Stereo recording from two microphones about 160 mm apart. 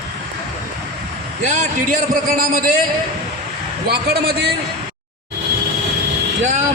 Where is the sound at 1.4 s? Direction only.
45° right (ahead or behind).